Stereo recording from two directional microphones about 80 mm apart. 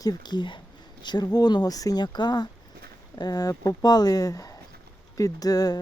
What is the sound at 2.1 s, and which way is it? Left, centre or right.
Speech, left.